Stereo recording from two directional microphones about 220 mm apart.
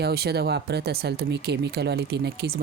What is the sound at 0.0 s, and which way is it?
Speech, 45° right (ahead or behind).